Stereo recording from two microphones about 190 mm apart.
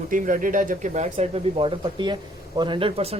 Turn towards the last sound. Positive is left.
turn(degrees=-30)  # may be behind; listen again after turning